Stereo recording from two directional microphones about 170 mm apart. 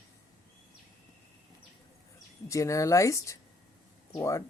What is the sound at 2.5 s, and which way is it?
A woman's voice, 20° left (ahead or behind).